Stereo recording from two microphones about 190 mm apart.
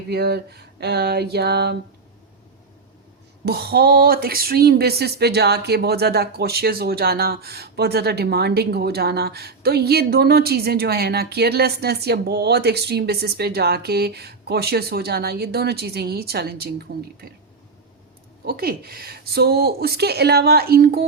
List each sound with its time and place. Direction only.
0.1 s speech: 60° right (ahead or behind)
3.4 s speech: 55° right (ahead or behind)
18.4 s speech: 55° right (ahead or behind)